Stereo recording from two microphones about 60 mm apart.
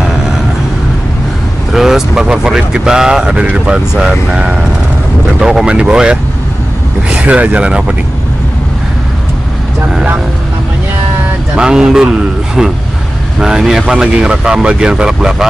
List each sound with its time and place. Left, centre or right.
1.7 s speech: centre
5.4 s speech: centre
11.5 s speech: centre
13.4 s speech: centre